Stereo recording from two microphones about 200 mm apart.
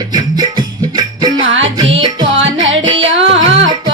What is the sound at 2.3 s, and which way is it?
Music, 70° right (ahead or behind).